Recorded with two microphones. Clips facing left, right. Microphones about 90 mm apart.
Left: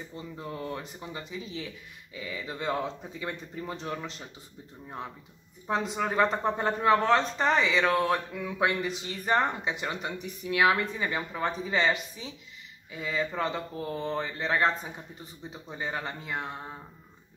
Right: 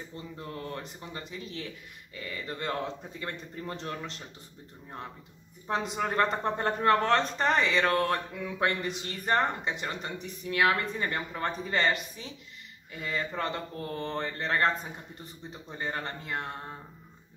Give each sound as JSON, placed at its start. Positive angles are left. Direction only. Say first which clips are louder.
{"t": 0.1, "sound": "speech", "louder": "left 3 dB", "side_deg": 10}
{"t": 5.7, "sound": "speech", "louder": "left 1 dB", "side_deg": 0}